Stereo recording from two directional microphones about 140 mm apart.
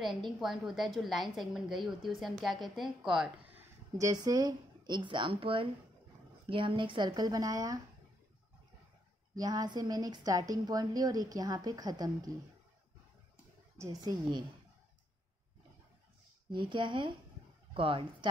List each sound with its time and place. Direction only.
0.4 s a woman's voice: centre (ahead or behind)
3.0 s a sound: 5° right (ahead or behind)
4.1 s speech: 25° right (ahead or behind)
9.3 s a woman's voice: 25° right (ahead or behind)
13.7 s a woman's voice: 25° right (ahead or behind)
16.5 s speech: 35° right (ahead or behind)